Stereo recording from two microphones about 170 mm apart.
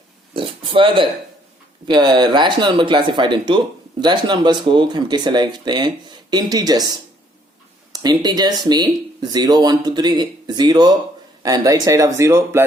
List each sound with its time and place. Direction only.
0.3 s speech: 30° right (ahead or behind)
7.9 s speech: 25° right (ahead or behind)